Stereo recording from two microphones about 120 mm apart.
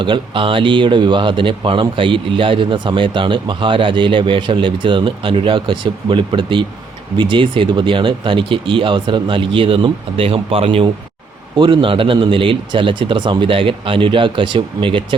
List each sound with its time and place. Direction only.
0.0 s a man's voice: 45° right (ahead or behind)
11.5 s a man's voice: 40° right (ahead or behind)